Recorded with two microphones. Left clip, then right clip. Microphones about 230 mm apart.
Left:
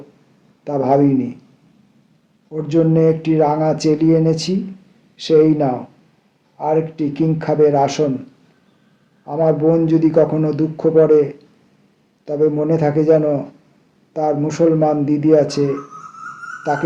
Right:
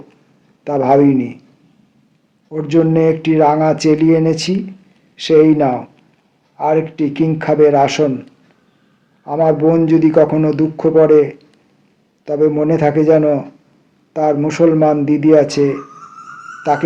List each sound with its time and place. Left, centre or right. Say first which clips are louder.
0.6 s speech: right 4 dB; right
2.5 s speech: right 3 dB; right
9.2 s a man's voice: right 3 dB; right